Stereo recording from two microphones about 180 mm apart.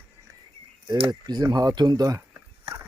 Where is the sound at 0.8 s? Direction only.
25° right (ahead or behind).